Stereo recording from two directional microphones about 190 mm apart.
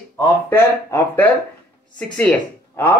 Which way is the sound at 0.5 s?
15° left (ahead or behind).